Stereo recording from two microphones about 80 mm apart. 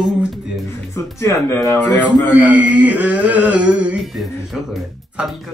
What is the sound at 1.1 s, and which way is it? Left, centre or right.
Speech, left.